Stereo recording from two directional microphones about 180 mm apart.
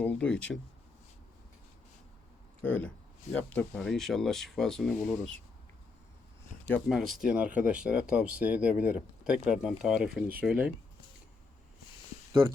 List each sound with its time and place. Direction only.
0.0 s speech: 5° left (ahead or behind)
2.6 s speech: 10° left (ahead or behind)
6.7 s speech: 10° left (ahead or behind)
6.9 s speech: centre (ahead or behind)